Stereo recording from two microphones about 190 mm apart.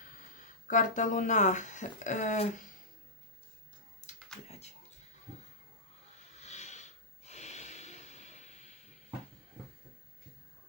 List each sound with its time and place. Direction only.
0.7 s speech: 40° left (ahead or behind)
4.1 s computer keyboard: 40° left (ahead or behind)
6.4 s snort: 35° left (ahead or behind)